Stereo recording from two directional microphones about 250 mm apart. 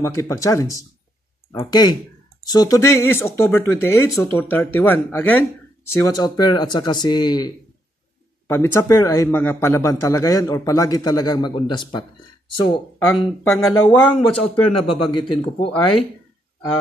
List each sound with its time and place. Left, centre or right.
0.0 s a man's voice: centre
13.5 s speech: centre
14.9 s a man's voice: centre